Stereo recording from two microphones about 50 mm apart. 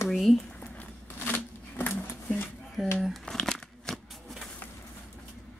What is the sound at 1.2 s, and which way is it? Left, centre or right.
Shuffling cards, left.